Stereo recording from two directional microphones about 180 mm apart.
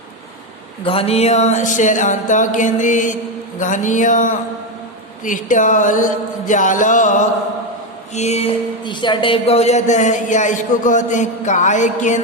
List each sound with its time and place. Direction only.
0.9 s music: 35° left (ahead or behind)
8.1 s speech: 35° left (ahead or behind)
8.8 s speech: 25° left (ahead or behind); by 12.2 s 40° left (ahead or behind)